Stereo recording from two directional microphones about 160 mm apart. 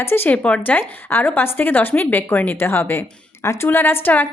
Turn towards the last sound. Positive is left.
turn(degrees=10)  # may be behind; listen again after turning